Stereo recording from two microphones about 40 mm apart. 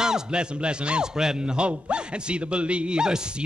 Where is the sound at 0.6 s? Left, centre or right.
Right.